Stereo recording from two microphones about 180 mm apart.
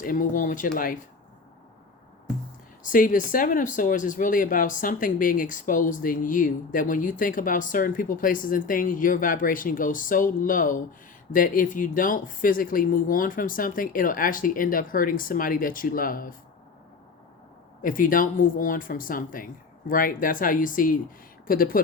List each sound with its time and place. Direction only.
0.0 s speech: 50° left (ahead or behind)
2.8 s speech: 50° left (ahead or behind)
17.8 s speech: 50° left (ahead or behind)